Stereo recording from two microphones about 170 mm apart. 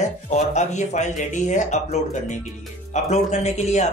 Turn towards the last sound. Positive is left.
turn(degrees=40)  # may be behind; listen again after turning